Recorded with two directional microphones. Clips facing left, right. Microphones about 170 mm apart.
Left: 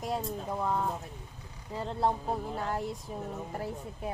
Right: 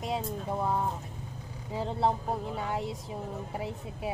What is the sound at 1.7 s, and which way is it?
Speech, 5° right (ahead or behind).